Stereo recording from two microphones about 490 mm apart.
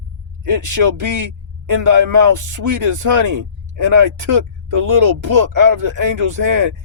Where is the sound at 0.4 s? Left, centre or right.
Right.